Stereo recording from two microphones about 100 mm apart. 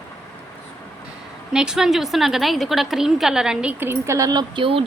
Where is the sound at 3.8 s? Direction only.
25° right (ahead or behind); by 4.6 s 45° right (ahead or behind).